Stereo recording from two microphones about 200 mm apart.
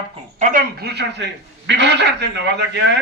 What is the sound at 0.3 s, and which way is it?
A man's voice, 45° right (ahead or behind).